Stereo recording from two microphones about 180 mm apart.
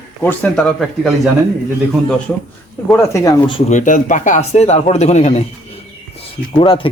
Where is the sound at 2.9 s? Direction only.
15° left (ahead or behind).